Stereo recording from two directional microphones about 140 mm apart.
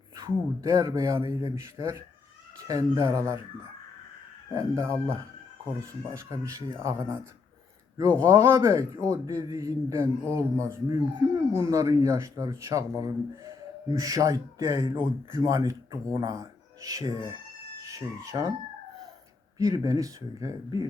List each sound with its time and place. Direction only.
0.2 s a man's voice: 20° right (ahead or behind)
4.5 s a man's voice: 20° right (ahead or behind)
8.2 s a man's voice: 20° right (ahead or behind)
19.5 s a man's voice: 25° right (ahead or behind)